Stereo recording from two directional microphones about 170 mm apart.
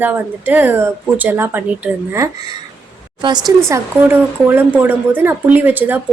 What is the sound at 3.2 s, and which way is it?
A woman's voice, 25° right (ahead or behind).